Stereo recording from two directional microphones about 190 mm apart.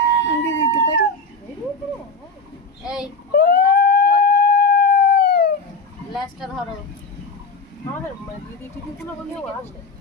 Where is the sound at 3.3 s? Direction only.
60° left (ahead or behind).